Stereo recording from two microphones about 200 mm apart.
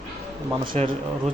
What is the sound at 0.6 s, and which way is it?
Speech, 30° right (ahead or behind).